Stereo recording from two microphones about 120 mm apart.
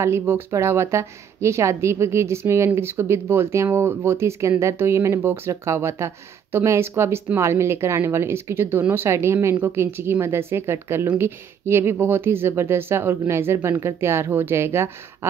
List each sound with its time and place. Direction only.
0.0 s a woman's voice: 20° right (ahead or behind)